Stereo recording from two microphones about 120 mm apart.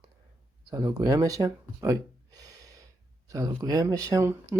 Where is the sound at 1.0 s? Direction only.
30° right (ahead or behind).